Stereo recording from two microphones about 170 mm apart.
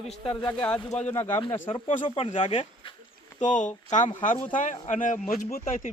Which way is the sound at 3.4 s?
45° left (ahead or behind).